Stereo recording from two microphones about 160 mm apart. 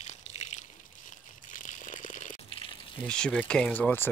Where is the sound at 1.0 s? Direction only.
55° left (ahead or behind).